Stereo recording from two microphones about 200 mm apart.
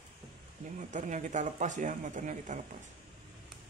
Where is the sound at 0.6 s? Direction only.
35° right (ahead or behind).